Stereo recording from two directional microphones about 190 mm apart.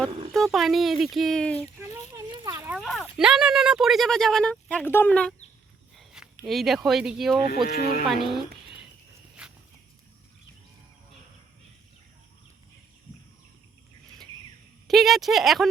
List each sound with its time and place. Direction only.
0.3 s speech: centre (ahead or behind)
2.4 s a sound: 20° right (ahead or behind)
2.6 s speech: 5° right (ahead or behind)
7.5 s speech: 50° left (ahead or behind)
8.0 s speech: centre (ahead or behind)
9.4 s walk: 5° right (ahead or behind)
14.8 s speech: centre (ahead or behind)